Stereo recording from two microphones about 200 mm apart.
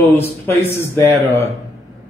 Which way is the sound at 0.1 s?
15° left (ahead or behind).